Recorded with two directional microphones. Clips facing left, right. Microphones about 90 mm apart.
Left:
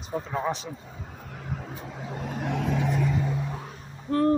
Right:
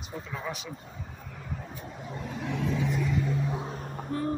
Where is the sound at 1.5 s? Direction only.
90° left; by 3.1 s 60° left (ahead or behind).